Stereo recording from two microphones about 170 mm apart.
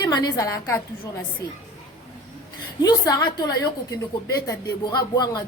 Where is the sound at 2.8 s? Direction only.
20° left (ahead or behind).